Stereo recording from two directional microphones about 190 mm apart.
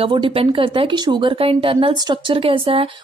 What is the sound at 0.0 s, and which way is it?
Speech, 25° right (ahead or behind).